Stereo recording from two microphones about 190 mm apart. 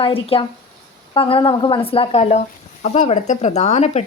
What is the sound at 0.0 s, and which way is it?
A woman's voice, 30° left (ahead or behind).